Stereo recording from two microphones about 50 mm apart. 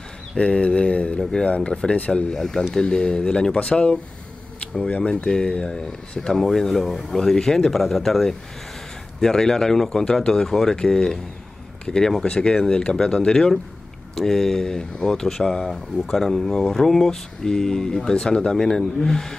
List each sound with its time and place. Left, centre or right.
0.4 s speech: left
2.3 s speech: centre